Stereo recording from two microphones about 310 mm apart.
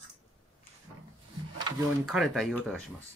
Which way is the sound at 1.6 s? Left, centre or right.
Centre.